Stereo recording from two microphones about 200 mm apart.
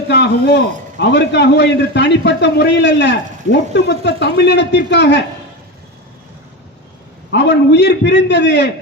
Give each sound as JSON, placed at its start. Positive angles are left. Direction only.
{"t": 0.1, "sound": "a man's voice", "side_deg": 60}
{"t": 7.3, "sound": "a man's voice", "side_deg": 60}